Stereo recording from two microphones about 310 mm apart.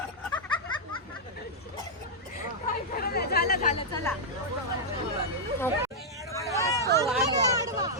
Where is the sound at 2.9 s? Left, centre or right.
Left.